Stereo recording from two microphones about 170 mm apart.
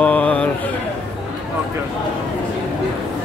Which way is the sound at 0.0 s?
10° left (ahead or behind).